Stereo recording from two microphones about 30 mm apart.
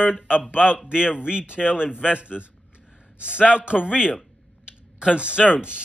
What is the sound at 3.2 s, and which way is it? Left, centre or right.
Speech, right.